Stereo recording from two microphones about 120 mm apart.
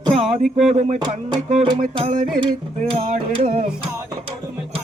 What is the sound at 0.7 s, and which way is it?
Music, 70° right (ahead or behind).